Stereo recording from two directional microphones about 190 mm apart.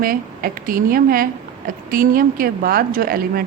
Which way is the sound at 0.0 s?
50° right (ahead or behind).